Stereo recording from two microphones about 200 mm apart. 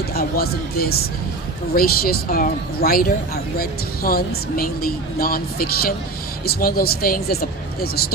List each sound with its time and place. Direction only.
0.1 s a woman's voice: 50° left (ahead or behind)